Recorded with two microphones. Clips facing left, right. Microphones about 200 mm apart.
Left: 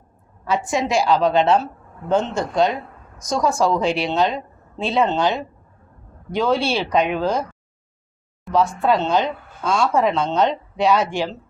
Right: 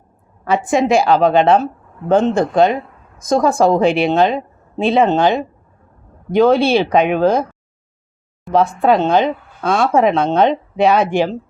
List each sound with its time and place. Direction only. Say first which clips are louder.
0.4 s speech: right 6 dB; 55° right (ahead or behind)
8.5 s speech: right 5 dB; 55° right (ahead or behind)